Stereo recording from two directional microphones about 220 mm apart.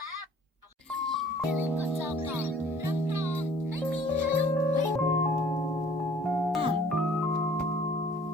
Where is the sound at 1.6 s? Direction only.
10° right (ahead or behind).